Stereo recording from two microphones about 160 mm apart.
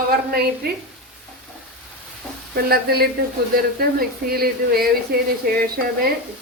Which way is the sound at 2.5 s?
75° right (ahead or behind).